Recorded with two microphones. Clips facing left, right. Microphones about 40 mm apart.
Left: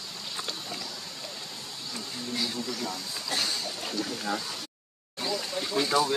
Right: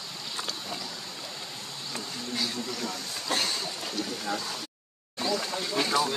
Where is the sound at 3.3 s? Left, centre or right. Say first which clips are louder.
Right 2 dB; right.